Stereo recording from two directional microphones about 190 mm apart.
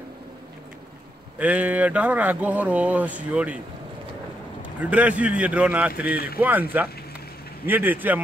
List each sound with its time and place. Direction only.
1.4 s speech: 10° right (ahead or behind)
6.1 s speech: 55° left (ahead or behind)
6.7 s speech: 10° right (ahead or behind)